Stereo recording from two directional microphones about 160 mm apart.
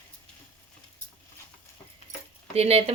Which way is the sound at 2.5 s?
40° right (ahead or behind).